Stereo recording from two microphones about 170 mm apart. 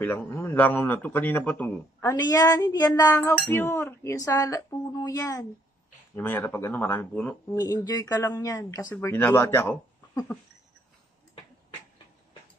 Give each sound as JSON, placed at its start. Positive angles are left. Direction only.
{"t": 0.0, "sound": "a man's voice", "side_deg": 15}
{"t": 2.1, "sound": "a man's voice", "side_deg": 20}
{"t": 7.5, "sound": "speech", "side_deg": 20}